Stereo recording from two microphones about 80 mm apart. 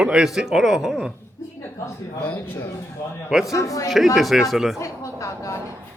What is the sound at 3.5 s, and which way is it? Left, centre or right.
Speech, left.